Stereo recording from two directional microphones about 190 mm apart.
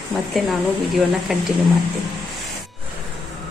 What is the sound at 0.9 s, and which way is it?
Speech, centre (ahead or behind).